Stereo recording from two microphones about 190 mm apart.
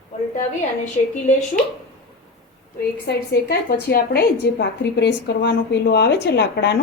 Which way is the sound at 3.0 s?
60° left (ahead or behind).